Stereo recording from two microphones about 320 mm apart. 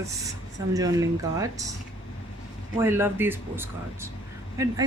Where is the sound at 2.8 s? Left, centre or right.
Centre.